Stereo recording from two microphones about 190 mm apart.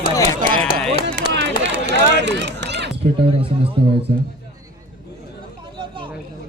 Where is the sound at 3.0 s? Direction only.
30° right (ahead or behind).